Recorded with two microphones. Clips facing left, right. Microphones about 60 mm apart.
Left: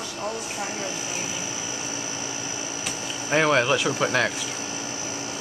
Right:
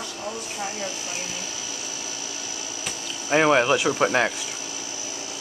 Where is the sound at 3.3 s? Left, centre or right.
Centre.